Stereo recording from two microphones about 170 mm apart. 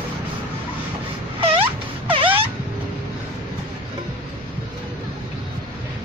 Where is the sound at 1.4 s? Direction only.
35° right (ahead or behind).